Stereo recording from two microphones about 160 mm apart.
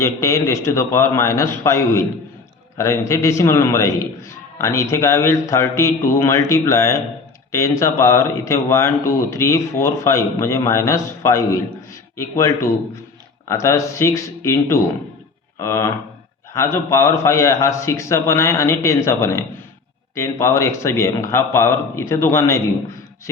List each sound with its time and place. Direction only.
0.0 s a man's voice: 20° left (ahead or behind)